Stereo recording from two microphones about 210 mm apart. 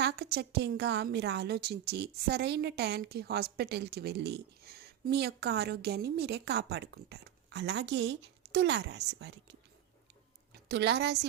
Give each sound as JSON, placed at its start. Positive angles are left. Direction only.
{"t": 0.0, "sound": "a woman's voice", "side_deg": -55}
{"t": 10.5, "sound": "a woman's voice", "side_deg": -55}